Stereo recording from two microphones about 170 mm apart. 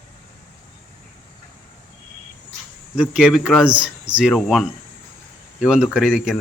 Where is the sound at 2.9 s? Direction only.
5° right (ahead or behind).